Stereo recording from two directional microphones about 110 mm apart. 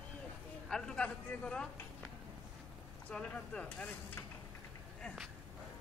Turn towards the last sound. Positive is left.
turn(degrees=10)  # may be behind; listen again after turning